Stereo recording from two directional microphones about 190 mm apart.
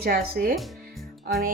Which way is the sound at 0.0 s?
50° right (ahead or behind).